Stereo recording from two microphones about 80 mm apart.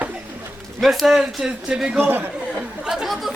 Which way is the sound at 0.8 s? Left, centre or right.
Centre.